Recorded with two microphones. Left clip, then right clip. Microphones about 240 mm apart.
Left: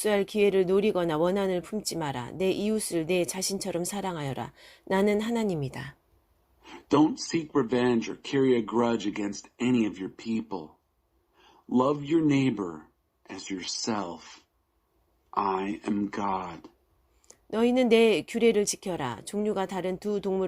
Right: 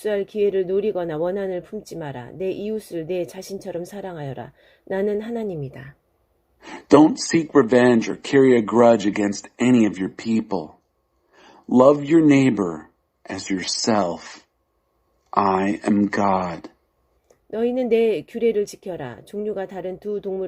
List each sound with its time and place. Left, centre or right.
0.0 s speech: left
6.6 s a man's voice: right
17.2 s speech: left